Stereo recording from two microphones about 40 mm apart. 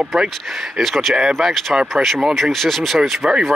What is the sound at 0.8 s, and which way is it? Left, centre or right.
Speech, centre.